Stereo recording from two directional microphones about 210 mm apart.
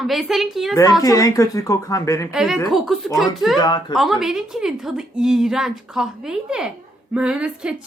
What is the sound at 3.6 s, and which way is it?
Speech, 20° left (ahead or behind).